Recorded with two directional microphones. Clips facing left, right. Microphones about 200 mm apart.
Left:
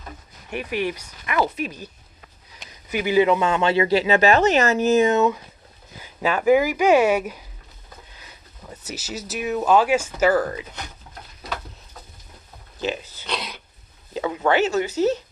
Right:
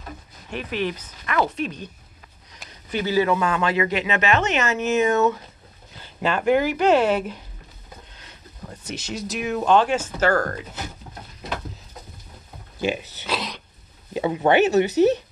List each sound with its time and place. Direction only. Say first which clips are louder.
0.5 s speech: left 1 dB; 10° left (ahead or behind)
2.9 s speech: left 3 dB; 15° left (ahead or behind); by 5.1 s 35° left (ahead or behind)
5.9 s speech: left 1 dB; 10° left (ahead or behind)
8.1 s a sound: right 1 dB; 5° left (ahead or behind)
9.3 s speech: even; centre (ahead or behind)
13.0 s speech: right 3 dB; 70° right (ahead or behind)
13.3 s a sound: right 2 dB; centre (ahead or behind)
14.1 s speech: right 2 dB; 20° right (ahead or behind)